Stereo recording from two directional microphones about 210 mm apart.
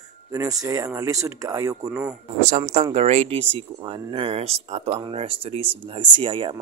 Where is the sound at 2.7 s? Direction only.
30° right (ahead or behind).